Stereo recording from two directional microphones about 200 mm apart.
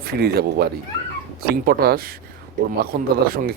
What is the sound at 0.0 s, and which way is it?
Speech, 50° right (ahead or behind).